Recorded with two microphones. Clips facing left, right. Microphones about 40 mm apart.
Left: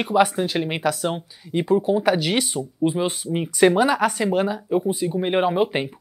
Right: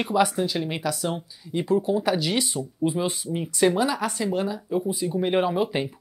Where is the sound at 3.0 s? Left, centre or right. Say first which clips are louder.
Left 3 dB; left.